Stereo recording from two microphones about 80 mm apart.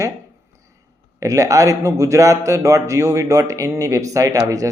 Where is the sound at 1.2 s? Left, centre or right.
Right.